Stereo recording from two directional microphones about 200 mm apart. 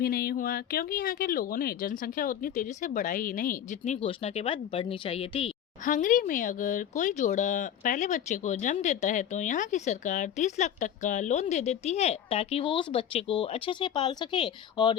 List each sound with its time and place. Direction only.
0.0 s speech: 50° left (ahead or behind); by 5.5 s 30° left (ahead or behind)
5.8 s speech: 40° left (ahead or behind); by 14.9 s 25° left (ahead or behind)